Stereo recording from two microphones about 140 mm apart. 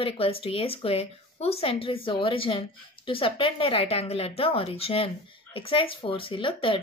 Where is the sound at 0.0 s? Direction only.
40° left (ahead or behind).